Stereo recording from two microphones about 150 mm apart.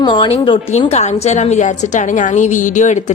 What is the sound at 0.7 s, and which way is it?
A woman's voice, 45° left (ahead or behind).